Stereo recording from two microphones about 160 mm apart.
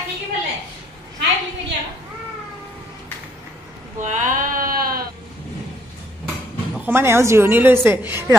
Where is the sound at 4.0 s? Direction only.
50° right (ahead or behind).